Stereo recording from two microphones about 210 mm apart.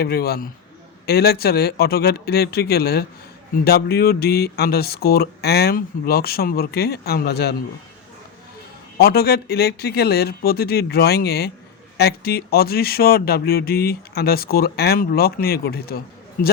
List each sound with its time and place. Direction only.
0.0 s speech: 45° left (ahead or behind)
9.0 s speech: 50° left (ahead or behind)